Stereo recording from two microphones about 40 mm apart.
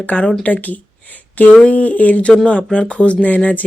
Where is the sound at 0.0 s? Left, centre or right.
Left.